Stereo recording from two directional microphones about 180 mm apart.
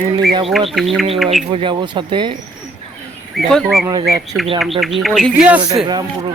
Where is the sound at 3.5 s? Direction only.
Centre (ahead or behind).